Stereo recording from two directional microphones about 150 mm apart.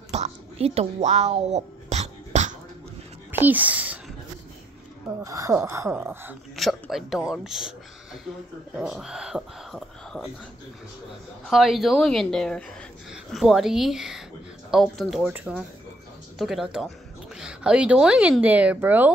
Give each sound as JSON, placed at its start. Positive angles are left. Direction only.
{"t": 0.1, "sound": "a sound", "side_deg": -45}
{"t": 3.3, "sound": "speech", "side_deg": -10}
{"t": 5.2, "sound": "speech", "side_deg": -20}
{"t": 6.5, "sound": "speech", "side_deg": 0}
{"t": 11.4, "sound": "speech", "side_deg": 0}